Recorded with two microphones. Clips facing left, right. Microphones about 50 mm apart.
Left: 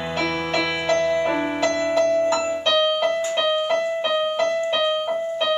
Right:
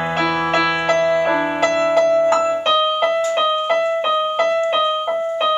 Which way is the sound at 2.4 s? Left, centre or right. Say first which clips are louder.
Right 4 dB; right.